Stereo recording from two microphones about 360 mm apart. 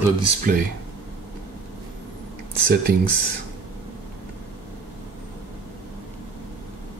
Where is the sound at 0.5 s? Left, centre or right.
Right.